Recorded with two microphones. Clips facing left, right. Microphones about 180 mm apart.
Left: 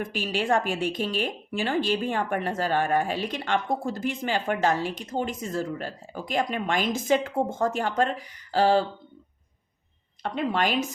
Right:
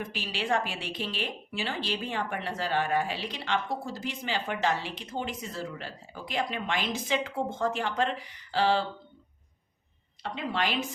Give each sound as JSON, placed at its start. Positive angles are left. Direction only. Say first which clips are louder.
{"t": 0.0, "sound": "speech", "louder": "left 6 dB", "side_deg": 50}
{"t": 10.2, "sound": "speech", "louder": "left 5 dB", "side_deg": 50}